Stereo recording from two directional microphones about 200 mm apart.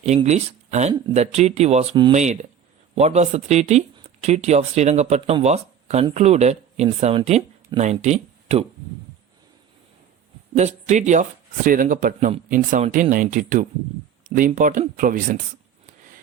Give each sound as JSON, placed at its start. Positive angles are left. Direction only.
{"t": 0.0, "sound": "speech", "side_deg": -35}
{"t": 10.5, "sound": "speech", "side_deg": -35}